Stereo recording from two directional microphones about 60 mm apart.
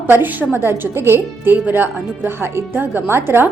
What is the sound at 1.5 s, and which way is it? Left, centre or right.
A woman's voice, right.